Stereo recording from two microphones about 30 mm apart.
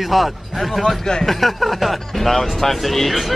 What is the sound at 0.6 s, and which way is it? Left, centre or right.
Speech, centre.